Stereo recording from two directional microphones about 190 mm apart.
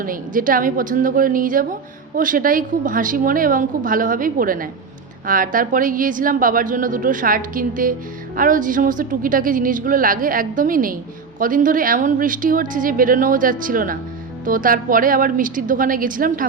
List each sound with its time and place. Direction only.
0.0 s a woman's voice: 45° right (ahead or behind)